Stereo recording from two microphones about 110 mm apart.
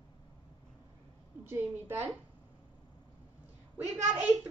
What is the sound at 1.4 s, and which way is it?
Speech, 20° right (ahead or behind).